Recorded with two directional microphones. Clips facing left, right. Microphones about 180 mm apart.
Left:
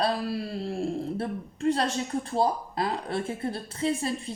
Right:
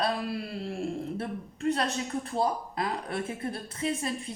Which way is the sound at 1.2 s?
30° left (ahead or behind).